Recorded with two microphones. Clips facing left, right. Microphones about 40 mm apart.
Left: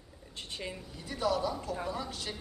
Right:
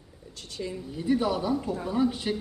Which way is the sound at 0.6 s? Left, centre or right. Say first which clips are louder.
Right 7 dB; left.